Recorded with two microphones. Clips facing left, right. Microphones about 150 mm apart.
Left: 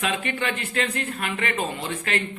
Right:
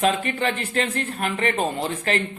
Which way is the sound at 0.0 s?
35° right (ahead or behind).